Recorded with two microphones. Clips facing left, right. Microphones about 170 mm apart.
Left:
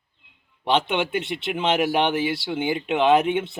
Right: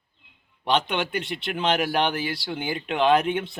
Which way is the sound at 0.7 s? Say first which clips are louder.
Left 2 dB; 25° left (ahead or behind).